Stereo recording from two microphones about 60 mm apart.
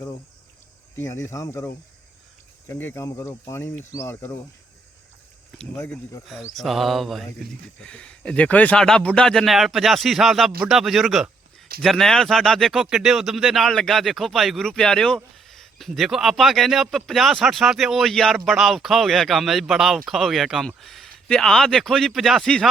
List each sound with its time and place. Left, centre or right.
1.0 s speech: left
2.6 s speech: left
3.2 s speech: left
6.5 s speech: centre
7.8 s speech: centre
8.8 s speech: centre
9.5 s speech: centre
14.7 s speech: centre
20.8 s a sound: centre
21.2 s speech: centre